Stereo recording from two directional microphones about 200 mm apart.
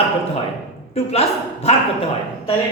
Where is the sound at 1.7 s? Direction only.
30° left (ahead or behind).